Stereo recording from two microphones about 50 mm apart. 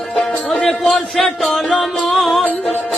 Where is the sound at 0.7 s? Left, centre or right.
Centre.